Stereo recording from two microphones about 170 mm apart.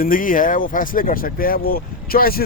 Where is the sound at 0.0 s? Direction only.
55° left (ahead or behind).